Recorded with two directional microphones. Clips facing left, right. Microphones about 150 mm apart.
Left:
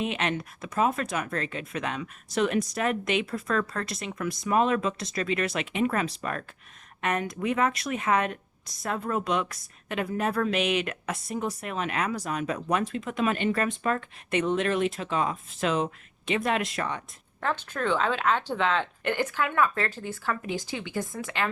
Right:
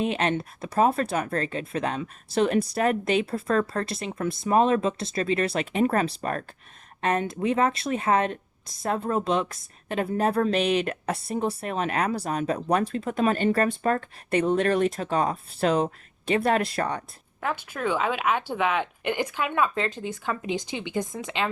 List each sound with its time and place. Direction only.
0.0 s a woman's voice: 35° right (ahead or behind)
17.4 s a woman's voice: 10° right (ahead or behind)